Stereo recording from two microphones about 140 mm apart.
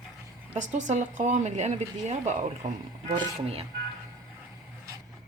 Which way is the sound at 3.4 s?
45° right (ahead or behind).